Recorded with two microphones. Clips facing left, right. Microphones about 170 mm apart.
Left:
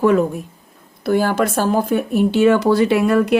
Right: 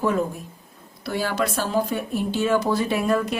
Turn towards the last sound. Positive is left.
turn(degrees=70)  # may be behind; listen again after turning